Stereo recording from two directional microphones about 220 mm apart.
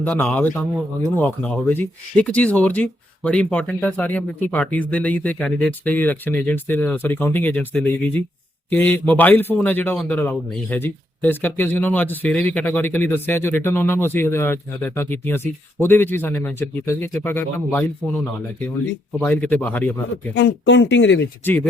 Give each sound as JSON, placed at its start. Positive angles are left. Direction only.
{"t": 0.0, "sound": "speech", "side_deg": 5}
{"t": 19.2, "sound": "speech", "side_deg": 5}
{"t": 20.3, "sound": "speech", "side_deg": 55}
{"t": 21.4, "sound": "speech", "side_deg": 10}